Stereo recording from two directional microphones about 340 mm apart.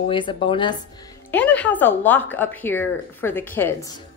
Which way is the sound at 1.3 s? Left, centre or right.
Centre.